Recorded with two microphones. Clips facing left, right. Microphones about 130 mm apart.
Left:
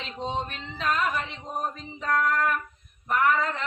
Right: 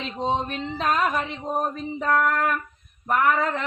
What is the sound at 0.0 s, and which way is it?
Speech, 40° right (ahead or behind).